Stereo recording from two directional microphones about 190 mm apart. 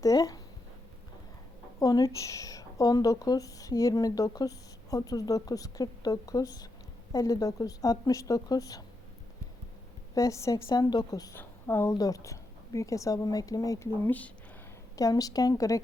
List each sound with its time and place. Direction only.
0.0 s speech: 20° left (ahead or behind)
1.8 s speech: 20° left (ahead or behind)
10.2 s a woman's voice: 15° left (ahead or behind)